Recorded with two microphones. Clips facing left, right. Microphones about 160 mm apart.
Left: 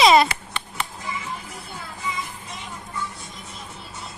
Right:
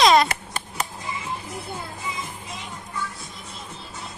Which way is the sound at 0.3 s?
45° right (ahead or behind).